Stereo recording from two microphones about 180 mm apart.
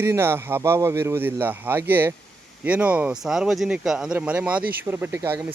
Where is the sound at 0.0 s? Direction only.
15° right (ahead or behind).